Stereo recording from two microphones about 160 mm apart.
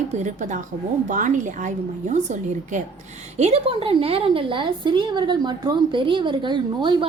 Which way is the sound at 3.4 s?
40° right (ahead or behind).